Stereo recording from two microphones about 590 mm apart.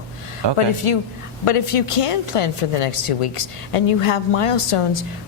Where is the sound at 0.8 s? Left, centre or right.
Left.